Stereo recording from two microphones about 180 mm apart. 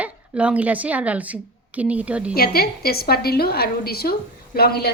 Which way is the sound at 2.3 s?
55° left (ahead or behind).